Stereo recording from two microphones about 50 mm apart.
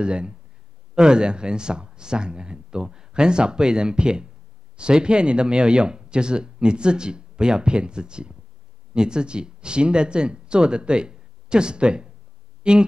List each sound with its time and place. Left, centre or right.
0.0 s speech: centre